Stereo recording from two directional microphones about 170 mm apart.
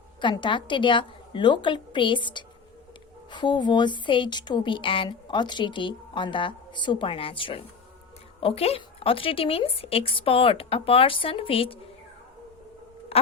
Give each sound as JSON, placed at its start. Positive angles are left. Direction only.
{"t": 0.2, "sound": "a woman's voice", "side_deg": 30}